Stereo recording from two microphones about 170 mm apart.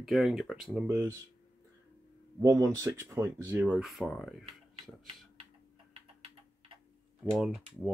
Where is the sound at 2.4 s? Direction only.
20° right (ahead or behind); by 4.4 s centre (ahead or behind).